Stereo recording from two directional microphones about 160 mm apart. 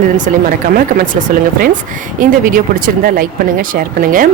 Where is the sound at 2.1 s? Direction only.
60° right (ahead or behind).